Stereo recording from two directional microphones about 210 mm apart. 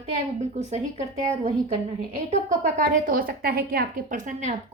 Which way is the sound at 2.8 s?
45° right (ahead or behind).